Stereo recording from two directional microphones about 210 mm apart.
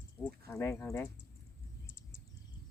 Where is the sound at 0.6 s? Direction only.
15° left (ahead or behind).